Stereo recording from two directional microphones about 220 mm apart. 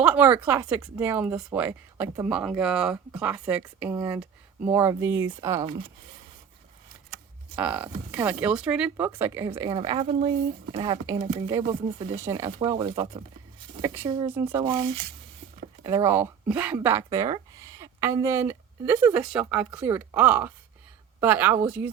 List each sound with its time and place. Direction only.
0.0 s speech: 5° right (ahead or behind)
7.5 s speech: 5° right (ahead or behind)
12.5 s speech: 25° right (ahead or behind); by 14.6 s 10° right (ahead or behind)
14.6 s speech: 20° right (ahead or behind)